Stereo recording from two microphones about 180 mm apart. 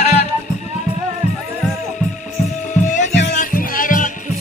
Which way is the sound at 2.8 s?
45° left (ahead or behind).